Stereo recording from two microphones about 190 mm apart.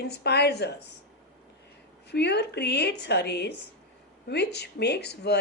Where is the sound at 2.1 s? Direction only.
60° left (ahead or behind).